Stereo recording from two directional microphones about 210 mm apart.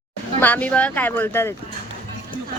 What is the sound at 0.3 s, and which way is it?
Speech, 10° left (ahead or behind).